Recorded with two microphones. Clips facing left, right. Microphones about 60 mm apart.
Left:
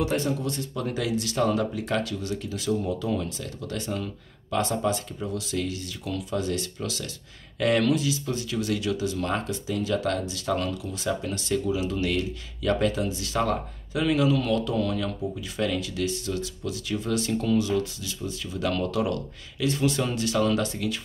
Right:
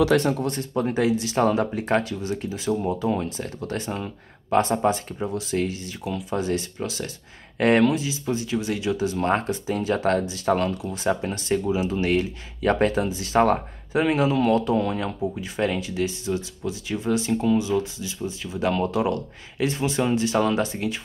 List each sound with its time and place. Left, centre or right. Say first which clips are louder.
0.2 s speech: right 4 dB; right
0.6 s speech: right 6 dB; right
7.8 s speech: right 3 dB; right